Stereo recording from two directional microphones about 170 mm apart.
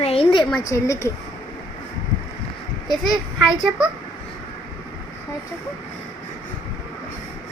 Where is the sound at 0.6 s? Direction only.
20° left (ahead or behind).